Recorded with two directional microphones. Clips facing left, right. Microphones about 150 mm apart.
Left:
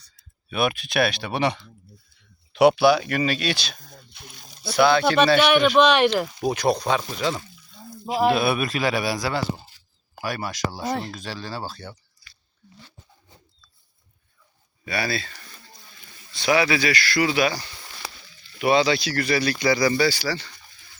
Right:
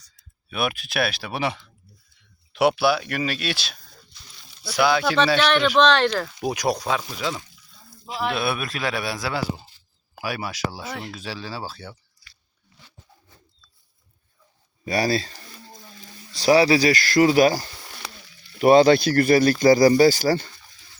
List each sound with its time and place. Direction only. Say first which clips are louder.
0.5 s speech: left 3 dB; centre (ahead or behind)
4.1 s a sound: left 7 dB; 55° left (ahead or behind)
4.7 s speech: left 2 dB; 10° right (ahead or behind)
5.4 s speech: left 2 dB; 10° left (ahead or behind)
6.4 s speech: left 1 dB; 10° right (ahead or behind)
8.0 s speech: left 7 dB; 45° left (ahead or behind)
8.3 s speech: left 2 dB; centre (ahead or behind)
10.8 s speech: left 6 dB; 35° left (ahead or behind)
11.1 s speech: even; 5° right (ahead or behind)
14.8 s a sound: right 5 dB; 40° right (ahead or behind)
16.3 s speech: right 5 dB; 35° right (ahead or behind)